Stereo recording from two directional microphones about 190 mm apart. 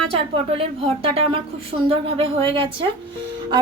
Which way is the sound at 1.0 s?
30° right (ahead or behind).